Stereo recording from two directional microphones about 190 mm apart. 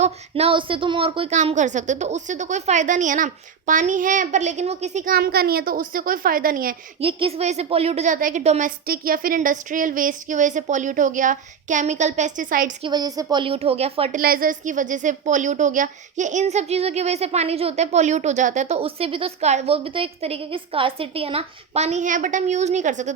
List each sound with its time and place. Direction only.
0.0 s a woman's voice: 30° right (ahead or behind)
5.1 s a woman's voice: 55° right (ahead or behind)
7.0 s a woman's voice: 30° right (ahead or behind); by 12.7 s 45° right (ahead or behind)
12.8 s a woman's voice: 20° right (ahead or behind)
14.2 s a woman's voice: 50° right (ahead or behind)